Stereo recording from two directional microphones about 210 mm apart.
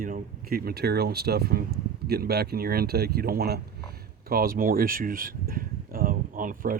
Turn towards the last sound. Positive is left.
turn(degrees=-40)  # may be behind; listen again after turning